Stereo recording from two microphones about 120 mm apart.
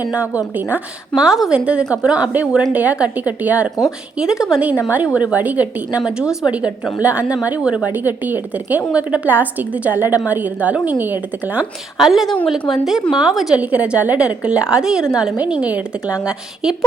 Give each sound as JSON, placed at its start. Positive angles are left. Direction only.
{"t": 0.1, "sound": "a woman's voice", "side_deg": -10}
{"t": 11.9, "sound": "a woman's voice", "side_deg": 0}